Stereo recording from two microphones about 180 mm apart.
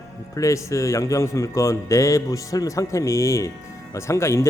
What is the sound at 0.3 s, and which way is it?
Speech, 15° left (ahead or behind).